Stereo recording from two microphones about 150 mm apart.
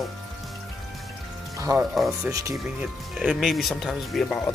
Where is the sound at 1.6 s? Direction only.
20° right (ahead or behind).